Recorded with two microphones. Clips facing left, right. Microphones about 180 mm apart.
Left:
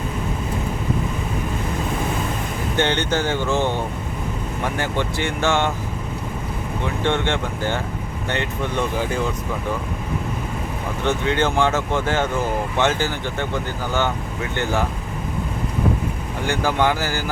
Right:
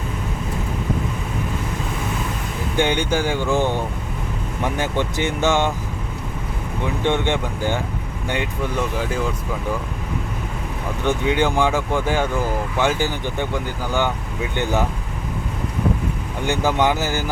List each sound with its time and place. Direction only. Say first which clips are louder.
2.7 s speech: right 1 dB; 10° right (ahead or behind)
6.8 s speech: right 1 dB; 15° right (ahead or behind)
11.0 s speech: right 1 dB; 15° right (ahead or behind)
16.5 s speech: right 1 dB; 20° right (ahead or behind)